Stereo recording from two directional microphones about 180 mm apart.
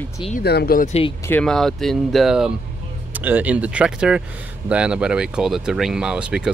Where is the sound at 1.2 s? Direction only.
5° left (ahead or behind).